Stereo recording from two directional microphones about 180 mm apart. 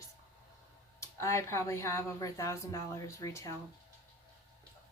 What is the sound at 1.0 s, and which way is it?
Speech, 15° left (ahead or behind).